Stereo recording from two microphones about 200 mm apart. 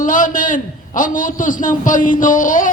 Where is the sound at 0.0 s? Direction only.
40° left (ahead or behind).